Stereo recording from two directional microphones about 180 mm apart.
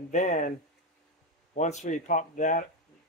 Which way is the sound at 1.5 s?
40° left (ahead or behind).